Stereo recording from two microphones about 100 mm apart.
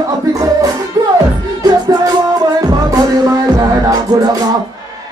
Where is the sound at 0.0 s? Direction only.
35° right (ahead or behind).